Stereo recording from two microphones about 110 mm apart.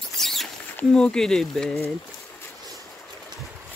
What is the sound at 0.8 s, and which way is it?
Speech, 5° left (ahead or behind).